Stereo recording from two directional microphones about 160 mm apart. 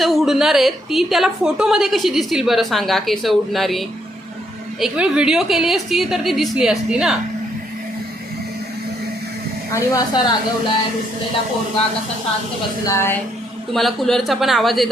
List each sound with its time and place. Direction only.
0.0 s a woman's voice: centre (ahead or behind)
9.7 s a woman's voice: 20° left (ahead or behind)
12.8 s speech: 15° left (ahead or behind)
13.7 s a woman's voice: centre (ahead or behind)